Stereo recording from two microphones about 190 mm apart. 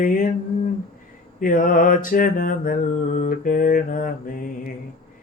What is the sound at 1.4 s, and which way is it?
Mantra, 45° left (ahead or behind).